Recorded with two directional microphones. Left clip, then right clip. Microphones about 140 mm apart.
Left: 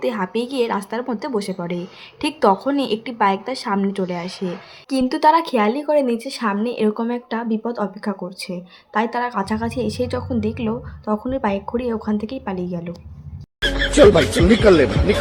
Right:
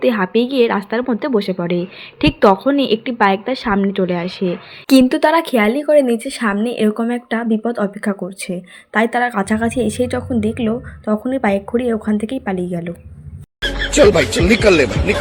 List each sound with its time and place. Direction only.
0.0 s a woman's voice: 15° right (ahead or behind)
13.6 s speech: centre (ahead or behind)